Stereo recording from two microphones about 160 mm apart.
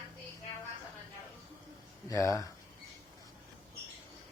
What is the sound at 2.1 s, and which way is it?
Speech, 20° left (ahead or behind).